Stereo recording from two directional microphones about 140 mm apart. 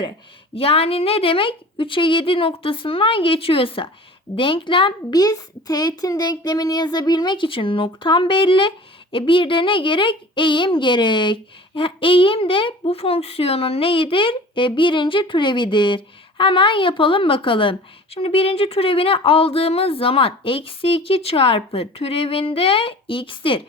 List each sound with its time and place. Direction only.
0.5 s a woman's voice: 45° left (ahead or behind)